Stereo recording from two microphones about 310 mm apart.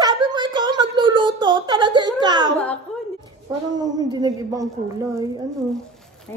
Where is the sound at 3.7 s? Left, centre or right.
Centre.